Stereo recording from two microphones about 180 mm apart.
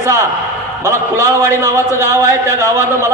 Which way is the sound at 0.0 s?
15° right (ahead or behind).